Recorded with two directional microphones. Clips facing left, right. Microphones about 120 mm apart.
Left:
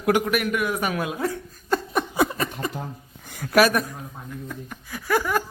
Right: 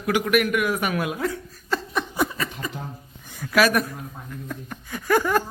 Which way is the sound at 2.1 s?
55° left (ahead or behind).